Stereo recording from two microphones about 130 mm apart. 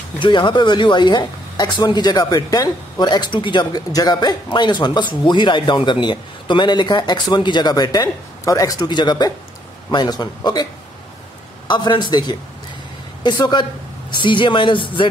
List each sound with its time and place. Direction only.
0.2 s a woman's voice: 35° left (ahead or behind)